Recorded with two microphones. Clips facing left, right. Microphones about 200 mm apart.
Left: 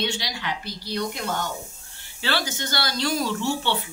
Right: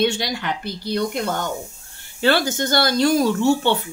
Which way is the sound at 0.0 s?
50° right (ahead or behind).